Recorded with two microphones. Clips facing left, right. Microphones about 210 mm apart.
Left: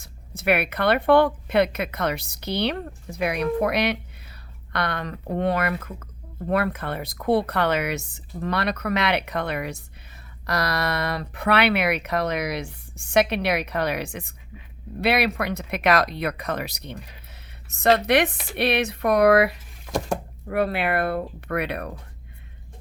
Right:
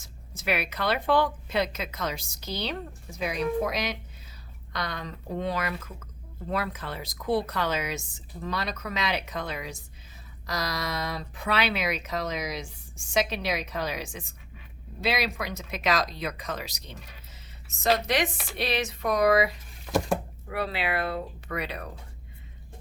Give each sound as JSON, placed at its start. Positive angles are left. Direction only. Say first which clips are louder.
{"t": 0.0, "sound": "speech", "louder": "left 7 dB", "side_deg": 60}
{"t": 19.8, "sound": "a sound", "louder": "even", "side_deg": 0}
{"t": 20.5, "sound": "speech", "louder": "left 7 dB", "side_deg": 55}